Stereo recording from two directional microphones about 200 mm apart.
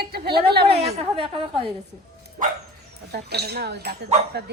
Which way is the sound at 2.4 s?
40° right (ahead or behind).